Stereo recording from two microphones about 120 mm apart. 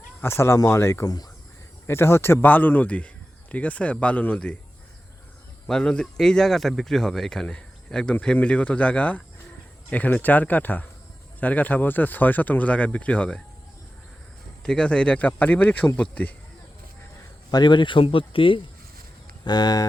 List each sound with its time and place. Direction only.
0.2 s speech: 20° left (ahead or behind)
1.9 s speech: 20° left (ahead or behind)
5.6 s speech: 5° left (ahead or behind)
14.6 s speech: 5° left (ahead or behind)
17.5 s speech: 40° left (ahead or behind)
19.5 s speech: 35° left (ahead or behind)